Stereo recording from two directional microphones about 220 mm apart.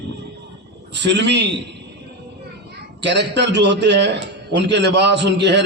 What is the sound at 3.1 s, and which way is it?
A man's voice, 50° right (ahead or behind).